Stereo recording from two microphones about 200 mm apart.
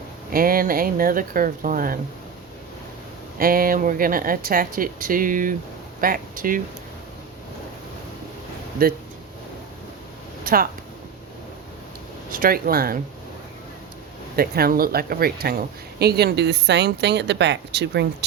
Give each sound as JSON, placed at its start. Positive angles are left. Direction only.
{"t": 0.3, "sound": "speech", "side_deg": -45}
{"t": 3.3, "sound": "speech", "side_deg": -45}
{"t": 8.8, "sound": "speech", "side_deg": -45}
{"t": 10.4, "sound": "speech", "side_deg": -45}
{"t": 12.3, "sound": "speech", "side_deg": -45}
{"t": 14.3, "sound": "speech", "side_deg": -50}